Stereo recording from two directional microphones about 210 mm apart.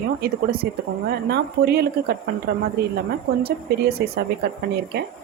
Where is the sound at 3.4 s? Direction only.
50° right (ahead or behind).